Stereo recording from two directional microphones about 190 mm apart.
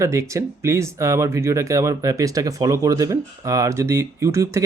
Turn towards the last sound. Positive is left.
turn(degrees=-15)  # may be behind; listen again after turning